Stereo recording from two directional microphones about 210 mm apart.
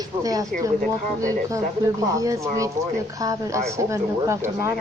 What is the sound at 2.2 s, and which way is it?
Speech, 15° right (ahead or behind).